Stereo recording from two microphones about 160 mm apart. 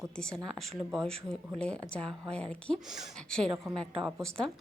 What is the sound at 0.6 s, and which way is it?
A woman's voice, centre (ahead or behind).